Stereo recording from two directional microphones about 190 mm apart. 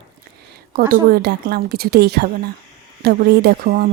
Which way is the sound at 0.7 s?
55° right (ahead or behind).